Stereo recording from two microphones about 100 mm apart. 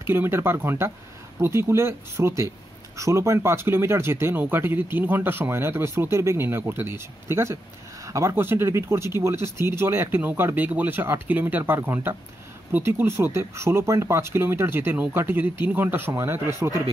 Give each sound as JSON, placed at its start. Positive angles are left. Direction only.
{"t": 0.0, "sound": "speech", "side_deg": -25}